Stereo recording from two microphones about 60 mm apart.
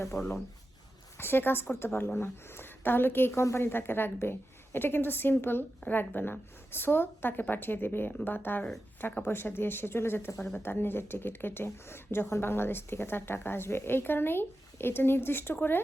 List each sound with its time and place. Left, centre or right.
0.1 s speech: left
1.2 s speech: left